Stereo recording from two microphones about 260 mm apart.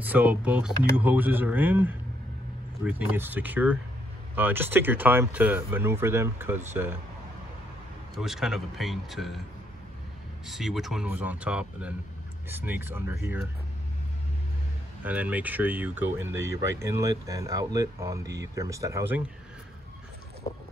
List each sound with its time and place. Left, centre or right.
0.0 s speech: centre
8.2 s speech: centre
10.4 s speech: centre
15.0 s speech: centre